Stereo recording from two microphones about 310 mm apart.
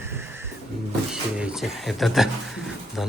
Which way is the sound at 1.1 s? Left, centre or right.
Centre.